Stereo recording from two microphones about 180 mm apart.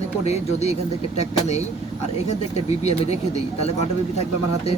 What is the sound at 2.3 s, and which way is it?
Speech, 35° left (ahead or behind).